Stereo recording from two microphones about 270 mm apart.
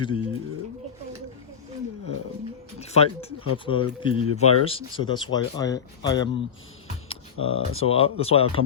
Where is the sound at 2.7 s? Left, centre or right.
Left.